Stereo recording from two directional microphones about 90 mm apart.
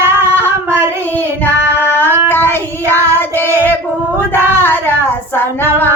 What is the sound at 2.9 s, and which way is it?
Child singing, 25° left (ahead or behind).